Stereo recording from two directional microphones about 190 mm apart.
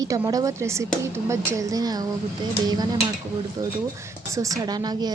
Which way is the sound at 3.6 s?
15° right (ahead or behind).